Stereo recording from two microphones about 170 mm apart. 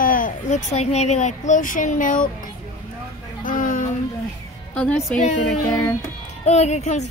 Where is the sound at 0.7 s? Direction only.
40° left (ahead or behind).